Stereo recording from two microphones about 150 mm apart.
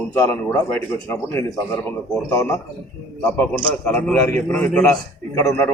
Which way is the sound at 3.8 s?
10° left (ahead or behind).